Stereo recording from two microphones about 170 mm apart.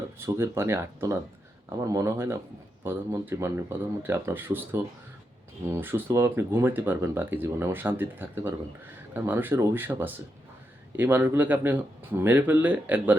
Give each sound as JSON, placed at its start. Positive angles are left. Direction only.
{"t": 0.2, "sound": "speech", "side_deg": -15}